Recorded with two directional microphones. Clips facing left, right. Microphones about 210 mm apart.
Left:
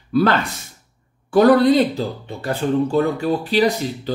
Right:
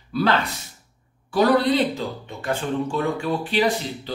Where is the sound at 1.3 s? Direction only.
50° left (ahead or behind).